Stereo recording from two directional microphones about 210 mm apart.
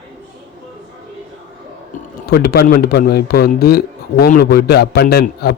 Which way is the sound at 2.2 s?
45° left (ahead or behind).